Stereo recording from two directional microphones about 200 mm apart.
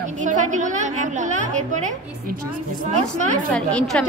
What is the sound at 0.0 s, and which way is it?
A woman's voice, 40° right (ahead or behind).